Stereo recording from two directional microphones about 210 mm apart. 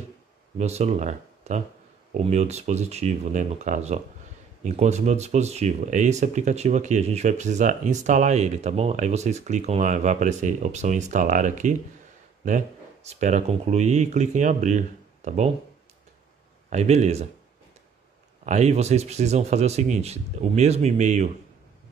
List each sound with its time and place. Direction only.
0.6 s speech: 30° right (ahead or behind)
16.7 s speech: 30° right (ahead or behind)
18.4 s speech: 35° right (ahead or behind)